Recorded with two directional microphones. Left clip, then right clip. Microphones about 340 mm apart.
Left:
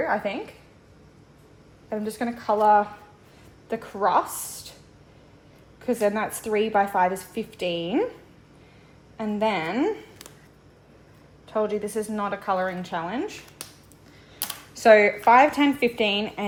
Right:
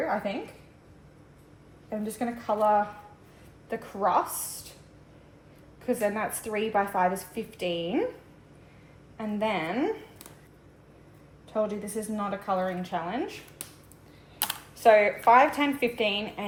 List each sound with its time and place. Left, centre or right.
1.9 s speech: left
5.8 s speech: left
9.1 s speech: left
11.5 s speech: left
14.8 s speech: left